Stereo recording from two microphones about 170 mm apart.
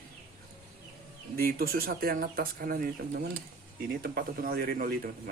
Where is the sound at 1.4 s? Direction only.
60° right (ahead or behind).